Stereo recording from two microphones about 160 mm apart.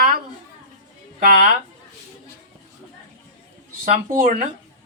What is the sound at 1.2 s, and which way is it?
Speech, 65° right (ahead or behind).